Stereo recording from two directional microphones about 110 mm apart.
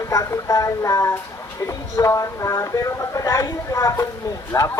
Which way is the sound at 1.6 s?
30° left (ahead or behind).